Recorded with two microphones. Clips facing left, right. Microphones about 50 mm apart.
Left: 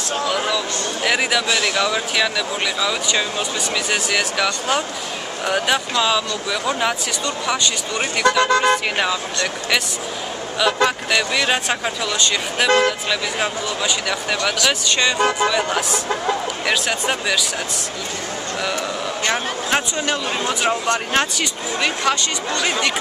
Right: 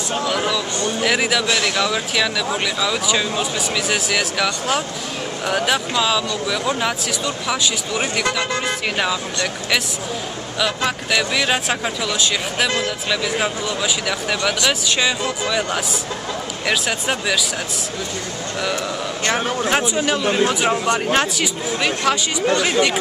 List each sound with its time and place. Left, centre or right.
0.3 s a sound: centre
1.0 s speech: centre
8.5 s speech: left
8.9 s speech: centre
10.6 s speech: centre
19.7 s speech: centre